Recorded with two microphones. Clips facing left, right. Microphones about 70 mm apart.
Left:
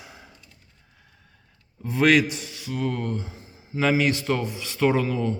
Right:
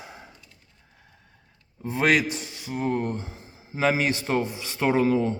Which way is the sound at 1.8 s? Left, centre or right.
Right.